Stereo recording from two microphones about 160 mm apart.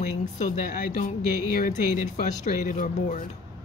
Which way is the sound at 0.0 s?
50° left (ahead or behind).